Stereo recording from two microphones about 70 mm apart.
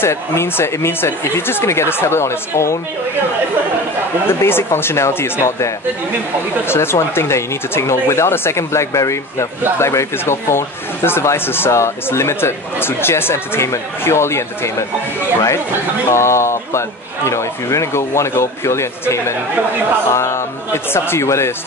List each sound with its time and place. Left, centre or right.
0.0 s speech: left
4.3 s speech: left
16.1 s speech: left